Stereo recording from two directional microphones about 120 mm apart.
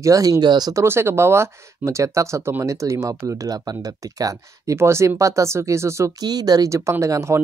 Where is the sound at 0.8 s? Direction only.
20° right (ahead or behind).